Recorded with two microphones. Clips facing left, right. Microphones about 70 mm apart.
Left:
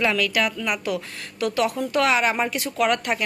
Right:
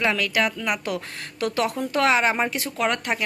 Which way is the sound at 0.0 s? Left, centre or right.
Right.